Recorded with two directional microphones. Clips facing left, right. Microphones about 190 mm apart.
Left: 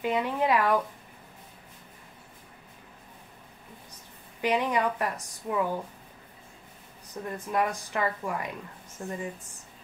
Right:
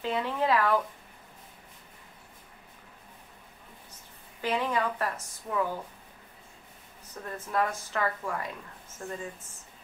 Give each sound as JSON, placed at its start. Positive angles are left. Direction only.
{"t": 0.0, "sound": "a woman's voice", "side_deg": 15}
{"t": 4.4, "sound": "a woman's voice", "side_deg": 15}
{"t": 7.2, "sound": "a woman's voice", "side_deg": 15}